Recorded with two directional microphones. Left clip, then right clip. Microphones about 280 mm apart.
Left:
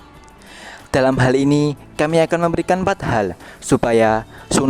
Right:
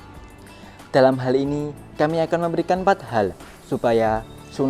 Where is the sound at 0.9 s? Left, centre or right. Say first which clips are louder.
Left 1 dB; left.